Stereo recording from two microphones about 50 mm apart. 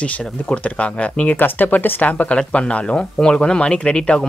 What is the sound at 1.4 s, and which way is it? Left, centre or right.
Speech, left.